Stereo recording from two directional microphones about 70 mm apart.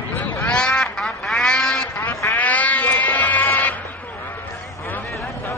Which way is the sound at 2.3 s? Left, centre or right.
Left.